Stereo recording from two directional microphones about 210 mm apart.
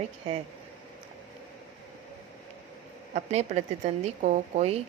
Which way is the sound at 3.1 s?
30° right (ahead or behind).